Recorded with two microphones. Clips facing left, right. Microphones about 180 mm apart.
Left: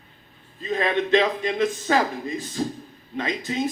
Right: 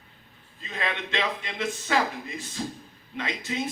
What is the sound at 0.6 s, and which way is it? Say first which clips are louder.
A man's voice: left 10 dB; 40° left (ahead or behind).